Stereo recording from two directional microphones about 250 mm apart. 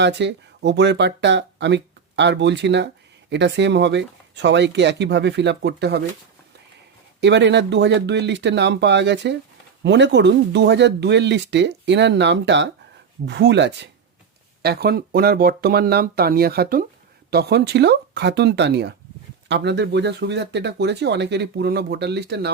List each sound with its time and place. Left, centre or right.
0.0 s speech: right
7.2 s speech: right